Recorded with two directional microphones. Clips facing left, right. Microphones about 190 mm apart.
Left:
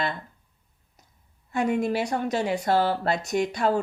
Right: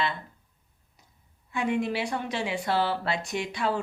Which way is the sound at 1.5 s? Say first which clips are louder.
Left 3 dB; 40° left (ahead or behind).